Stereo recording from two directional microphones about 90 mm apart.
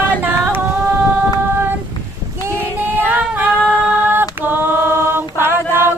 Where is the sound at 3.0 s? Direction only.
20° right (ahead or behind).